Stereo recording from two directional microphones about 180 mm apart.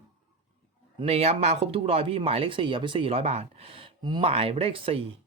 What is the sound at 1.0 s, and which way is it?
Speech, 35° right (ahead or behind).